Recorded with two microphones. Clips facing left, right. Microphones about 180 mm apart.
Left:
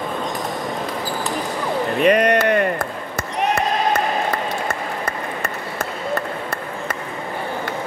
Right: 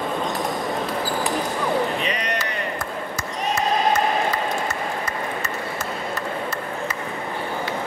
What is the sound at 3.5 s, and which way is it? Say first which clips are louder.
Applause: right 1 dB; 55° left (ahead or behind).